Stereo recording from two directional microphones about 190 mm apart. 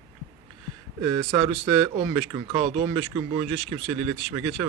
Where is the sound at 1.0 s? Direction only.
20° right (ahead or behind).